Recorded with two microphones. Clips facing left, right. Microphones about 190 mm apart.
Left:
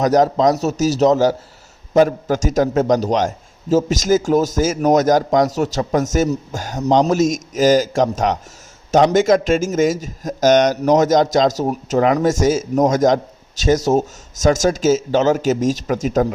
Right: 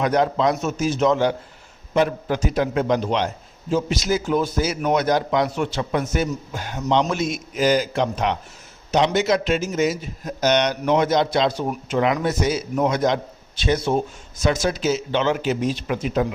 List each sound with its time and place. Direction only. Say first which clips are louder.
0.0 s a man's voice: left 5 dB; 40° left (ahead or behind)